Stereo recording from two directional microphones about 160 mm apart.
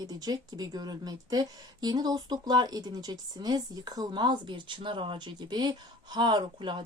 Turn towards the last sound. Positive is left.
turn(degrees=-30)  # may be behind; listen again after turning